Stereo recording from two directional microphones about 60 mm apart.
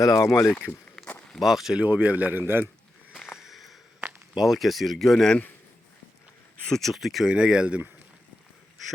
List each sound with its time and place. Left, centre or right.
0.0 s speech: left
1.0 s walk: centre
1.3 s speech: centre
1.8 s a man's voice: right
3.2 s a sound: centre
4.4 s speech: centre
6.7 s speech: centre
7.3 s speech: centre